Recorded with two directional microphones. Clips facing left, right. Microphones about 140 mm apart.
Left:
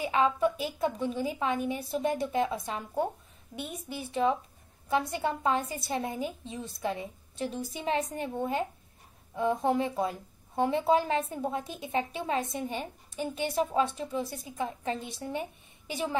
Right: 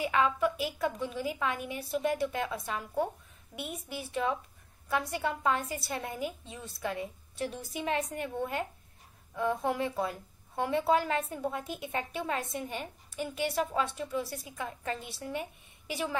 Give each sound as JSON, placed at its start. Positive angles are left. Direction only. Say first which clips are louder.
{"t": 0.0, "sound": "a woman's voice", "louder": "left 2 dB", "side_deg": 25}
{"t": 4.1, "sound": "a woman's voice", "louder": "left 5 dB", "side_deg": 30}